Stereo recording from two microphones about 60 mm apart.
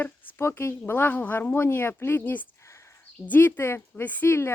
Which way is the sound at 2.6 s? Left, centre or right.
Left.